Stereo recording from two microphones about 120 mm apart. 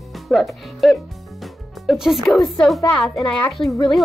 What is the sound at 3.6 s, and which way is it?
Speech, 35° left (ahead or behind).